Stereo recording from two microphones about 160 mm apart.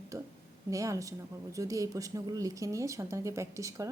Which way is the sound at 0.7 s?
20° right (ahead or behind).